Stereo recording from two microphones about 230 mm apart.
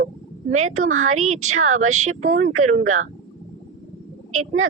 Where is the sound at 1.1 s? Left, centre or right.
Right.